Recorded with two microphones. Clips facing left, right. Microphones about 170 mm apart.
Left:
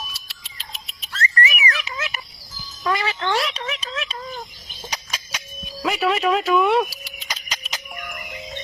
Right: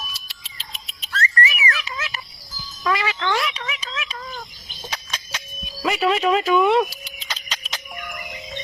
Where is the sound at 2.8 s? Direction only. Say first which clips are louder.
Even; 25° left (ahead or behind).